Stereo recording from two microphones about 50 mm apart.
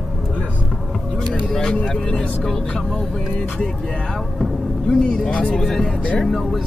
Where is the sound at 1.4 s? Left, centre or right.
Centre.